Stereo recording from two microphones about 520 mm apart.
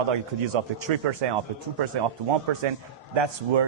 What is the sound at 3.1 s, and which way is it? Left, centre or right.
Speech, right.